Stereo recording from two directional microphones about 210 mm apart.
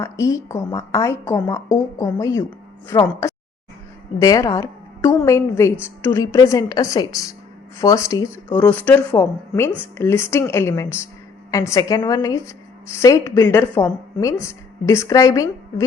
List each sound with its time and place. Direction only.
0.0 s a woman's voice: 15° left (ahead or behind)